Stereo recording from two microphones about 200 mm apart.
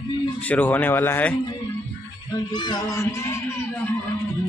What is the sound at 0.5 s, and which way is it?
Speech, 10° left (ahead or behind).